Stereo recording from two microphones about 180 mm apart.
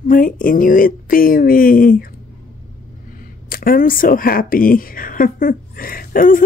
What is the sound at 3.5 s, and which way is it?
A woman's voice, 55° left (ahead or behind).